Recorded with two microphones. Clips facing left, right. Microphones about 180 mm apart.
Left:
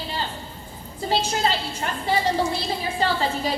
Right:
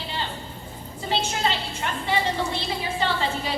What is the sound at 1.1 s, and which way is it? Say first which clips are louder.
A woman's voice: left 2 dB; 40° left (ahead or behind).